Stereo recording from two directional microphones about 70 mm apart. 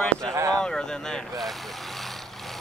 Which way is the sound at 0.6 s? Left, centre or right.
Centre.